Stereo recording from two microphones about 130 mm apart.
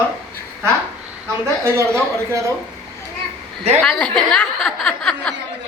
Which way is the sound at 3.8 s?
5° left (ahead or behind).